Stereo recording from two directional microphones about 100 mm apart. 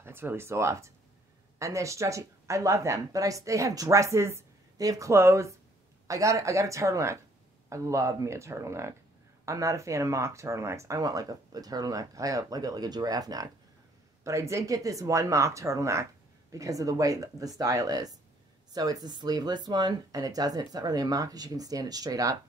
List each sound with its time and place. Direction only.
0.0 s speech: 20° right (ahead or behind); by 22.4 s 35° right (ahead or behind)